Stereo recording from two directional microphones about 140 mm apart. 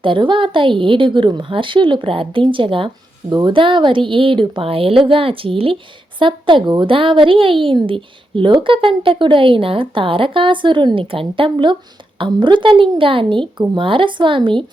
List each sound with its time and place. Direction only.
0.0 s speech: 35° right (ahead or behind)